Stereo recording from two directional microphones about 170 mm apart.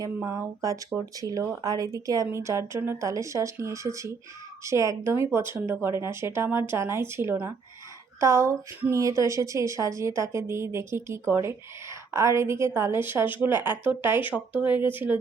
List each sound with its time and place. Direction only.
0.0 s a woman's voice: 15° right (ahead or behind)